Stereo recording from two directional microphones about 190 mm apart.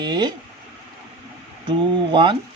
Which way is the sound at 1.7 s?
25° right (ahead or behind).